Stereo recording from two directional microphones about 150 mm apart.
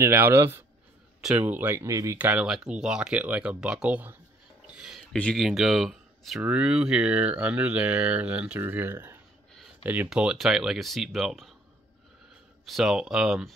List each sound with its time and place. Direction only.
0.0 s speech: 15° right (ahead or behind)
4.7 s a sound: centre (ahead or behind)
5.1 s speech: 5° left (ahead or behind)
12.6 s speech: centre (ahead or behind)